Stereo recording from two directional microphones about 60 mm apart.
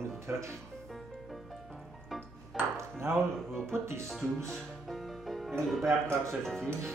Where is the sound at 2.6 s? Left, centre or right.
Right.